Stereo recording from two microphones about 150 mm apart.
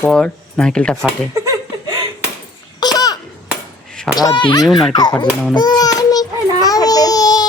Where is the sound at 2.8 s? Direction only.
25° left (ahead or behind).